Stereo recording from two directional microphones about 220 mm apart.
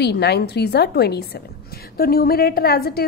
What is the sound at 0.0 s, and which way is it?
A woman's voice, 50° left (ahead or behind).